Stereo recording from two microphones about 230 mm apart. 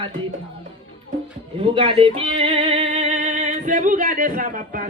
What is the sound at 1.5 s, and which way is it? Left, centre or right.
Music, right.